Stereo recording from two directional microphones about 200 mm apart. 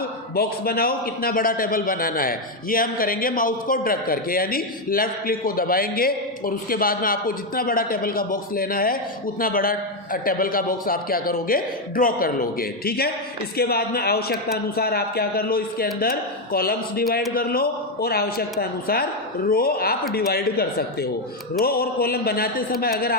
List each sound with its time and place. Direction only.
0.3 s a man's voice: 50° left (ahead or behind)